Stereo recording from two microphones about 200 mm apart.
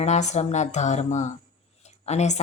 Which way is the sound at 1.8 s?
35° left (ahead or behind).